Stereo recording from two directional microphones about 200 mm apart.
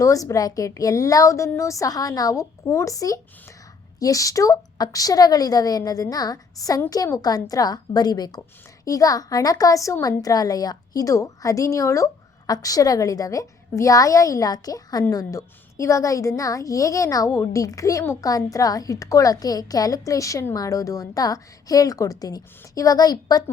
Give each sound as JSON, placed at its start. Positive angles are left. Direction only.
{"t": 0.0, "sound": "a woman's voice", "side_deg": 15}